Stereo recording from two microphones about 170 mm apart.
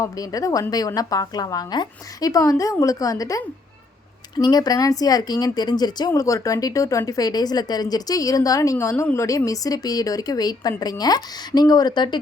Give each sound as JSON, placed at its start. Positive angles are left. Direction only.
{"t": 0.0, "sound": "speech", "side_deg": 20}